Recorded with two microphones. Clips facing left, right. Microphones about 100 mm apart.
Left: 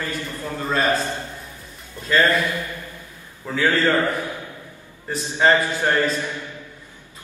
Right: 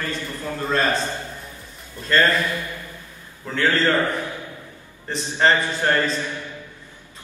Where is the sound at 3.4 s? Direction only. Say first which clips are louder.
Left 1 dB; 10° left (ahead or behind).